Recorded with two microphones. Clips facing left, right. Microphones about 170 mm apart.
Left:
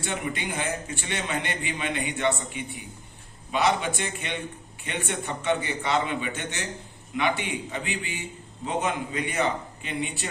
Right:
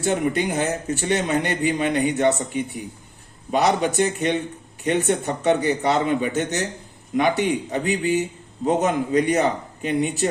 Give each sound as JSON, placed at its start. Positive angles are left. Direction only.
{"t": 0.0, "sound": "a man's voice", "side_deg": -45}